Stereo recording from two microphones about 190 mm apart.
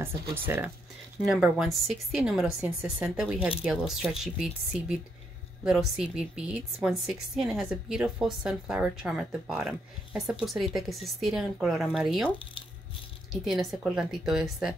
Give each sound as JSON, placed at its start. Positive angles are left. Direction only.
{"t": 0.0, "sound": "a woman's voice", "side_deg": -10}
{"t": 13.3, "sound": "a woman's voice", "side_deg": 0}